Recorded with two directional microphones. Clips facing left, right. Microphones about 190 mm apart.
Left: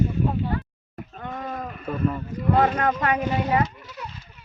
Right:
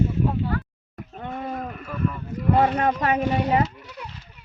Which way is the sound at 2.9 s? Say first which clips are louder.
Right 1 dB; 25° right (ahead or behind).